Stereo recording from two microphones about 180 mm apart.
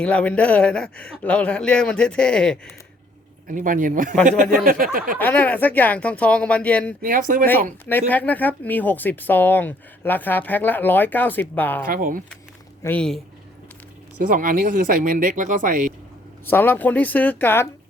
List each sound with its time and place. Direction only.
0.0 s speech: 5° left (ahead or behind)
3.4 s speech: 50° right (ahead or behind)
5.1 s speech: 10° left (ahead or behind)
7.0 s speech: 50° right (ahead or behind)
7.9 s speech: 10° left (ahead or behind)
11.9 s speech: 50° right (ahead or behind)
12.8 s speech: 10° left (ahead or behind)
14.2 s speech: 50° right (ahead or behind)
16.5 s speech: 10° left (ahead or behind)